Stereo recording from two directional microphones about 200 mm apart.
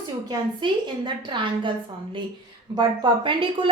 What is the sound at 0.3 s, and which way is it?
A woman's voice, 25° right (ahead or behind).